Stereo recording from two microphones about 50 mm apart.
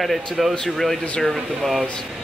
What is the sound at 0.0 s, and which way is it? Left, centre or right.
Speech, centre.